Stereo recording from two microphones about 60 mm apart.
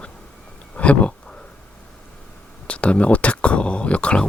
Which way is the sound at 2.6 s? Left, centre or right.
Centre.